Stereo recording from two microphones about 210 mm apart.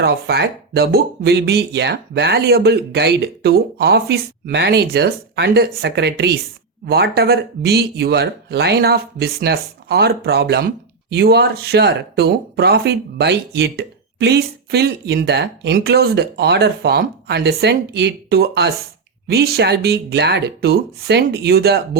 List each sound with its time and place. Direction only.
0.0 s speech: 50° right (ahead or behind)